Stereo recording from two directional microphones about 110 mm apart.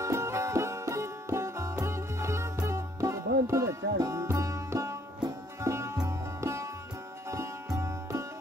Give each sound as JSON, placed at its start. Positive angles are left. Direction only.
{"t": 0.0, "sound": "music", "side_deg": -25}